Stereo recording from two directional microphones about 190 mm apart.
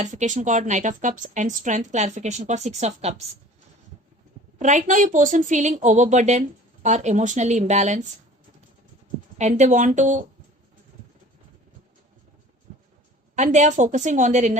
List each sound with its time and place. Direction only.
0.0 s a woman's voice: 40° right (ahead or behind)
4.6 s a woman's voice: 40° right (ahead or behind)
9.4 s a woman's voice: 40° right (ahead or behind)
13.3 s a woman's voice: 40° right (ahead or behind)